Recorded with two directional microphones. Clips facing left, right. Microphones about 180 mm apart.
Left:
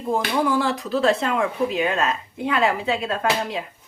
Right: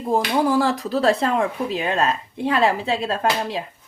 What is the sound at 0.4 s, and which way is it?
A woman's voice, 35° right (ahead or behind).